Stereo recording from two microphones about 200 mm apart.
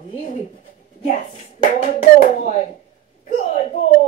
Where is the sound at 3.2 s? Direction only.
35° left (ahead or behind).